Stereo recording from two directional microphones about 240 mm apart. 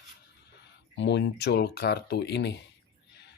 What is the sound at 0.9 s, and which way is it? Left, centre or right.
Speech, left.